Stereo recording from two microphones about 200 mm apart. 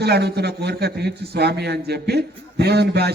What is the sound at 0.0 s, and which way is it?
A man's voice, 55° right (ahead or behind).